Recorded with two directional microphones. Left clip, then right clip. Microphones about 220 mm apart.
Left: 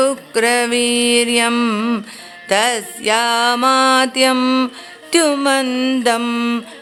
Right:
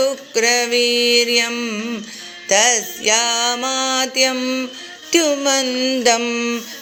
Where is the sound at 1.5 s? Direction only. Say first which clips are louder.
Left 6 dB; 25° left (ahead or behind).